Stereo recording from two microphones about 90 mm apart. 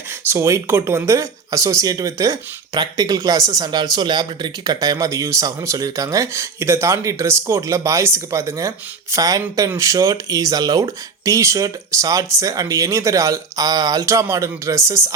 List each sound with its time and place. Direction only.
0.3 s speech: 30° right (ahead or behind)